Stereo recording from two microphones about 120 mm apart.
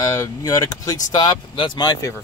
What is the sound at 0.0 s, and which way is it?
Speech, 30° left (ahead or behind).